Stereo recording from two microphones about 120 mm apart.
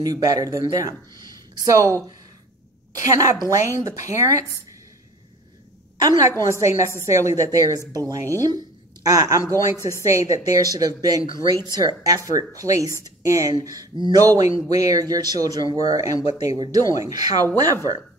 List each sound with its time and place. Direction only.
0.0 s speech: 30° right (ahead or behind)
3.0 s speech: 30° right (ahead or behind)
5.9 s a woman's voice: 30° right (ahead or behind)